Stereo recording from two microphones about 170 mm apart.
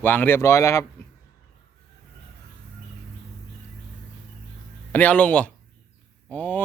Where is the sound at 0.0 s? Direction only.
10° left (ahead or behind).